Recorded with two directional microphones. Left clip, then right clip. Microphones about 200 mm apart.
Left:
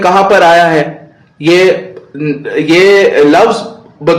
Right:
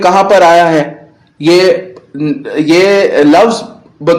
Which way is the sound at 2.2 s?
40° right (ahead or behind).